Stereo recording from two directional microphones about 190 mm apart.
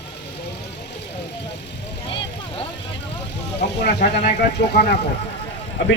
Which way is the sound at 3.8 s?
60° left (ahead or behind).